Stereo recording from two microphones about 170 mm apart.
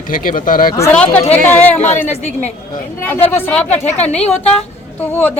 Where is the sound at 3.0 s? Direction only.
15° left (ahead or behind).